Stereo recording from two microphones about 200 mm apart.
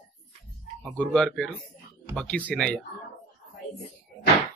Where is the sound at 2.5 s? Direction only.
5° left (ahead or behind).